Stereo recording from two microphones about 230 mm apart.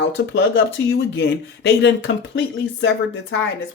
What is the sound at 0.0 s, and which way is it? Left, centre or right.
Speech, left.